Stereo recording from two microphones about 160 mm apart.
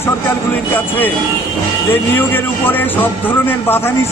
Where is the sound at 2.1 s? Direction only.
10° left (ahead or behind).